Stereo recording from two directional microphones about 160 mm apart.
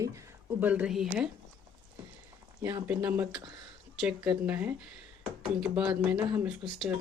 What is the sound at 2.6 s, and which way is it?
Speech, 15° right (ahead or behind).